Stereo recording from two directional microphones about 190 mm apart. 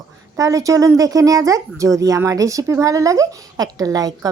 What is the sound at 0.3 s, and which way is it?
Speech, 15° right (ahead or behind).